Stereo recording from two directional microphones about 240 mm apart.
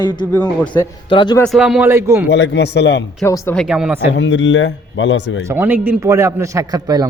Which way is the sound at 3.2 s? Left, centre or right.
Centre.